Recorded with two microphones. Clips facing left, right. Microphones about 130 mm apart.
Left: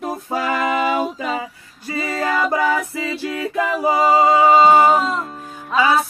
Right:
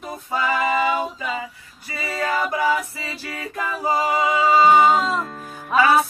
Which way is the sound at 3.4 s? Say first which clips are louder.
Left 6 dB; 90° left.